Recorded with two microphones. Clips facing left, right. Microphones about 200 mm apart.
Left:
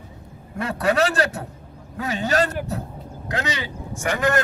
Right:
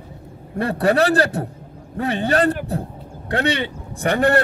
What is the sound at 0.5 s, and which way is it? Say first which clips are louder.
Speech: right 4 dB; 35° right (ahead or behind).